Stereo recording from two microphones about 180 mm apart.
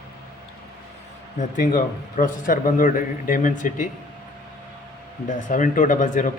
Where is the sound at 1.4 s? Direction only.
45° left (ahead or behind).